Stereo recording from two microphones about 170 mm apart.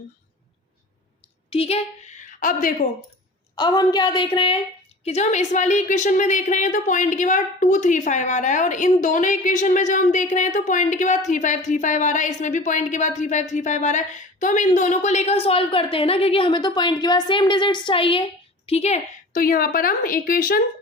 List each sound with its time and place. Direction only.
1.5 s speech: 35° left (ahead or behind)
2.4 s a woman's voice: 50° left (ahead or behind)
3.5 s a woman's voice: 25° left (ahead or behind)
5.0 s a woman's voice: 40° left (ahead or behind)
19.3 s a woman's voice: 55° left (ahead or behind)